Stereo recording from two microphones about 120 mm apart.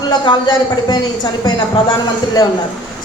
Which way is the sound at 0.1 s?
40° left (ahead or behind).